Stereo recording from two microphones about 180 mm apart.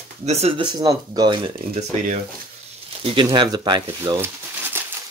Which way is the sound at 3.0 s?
25° right (ahead or behind).